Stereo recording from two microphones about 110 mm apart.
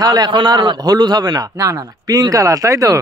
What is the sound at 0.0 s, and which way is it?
A man's voice, 40° right (ahead or behind).